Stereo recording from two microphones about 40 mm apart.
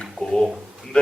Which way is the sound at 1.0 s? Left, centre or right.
Left.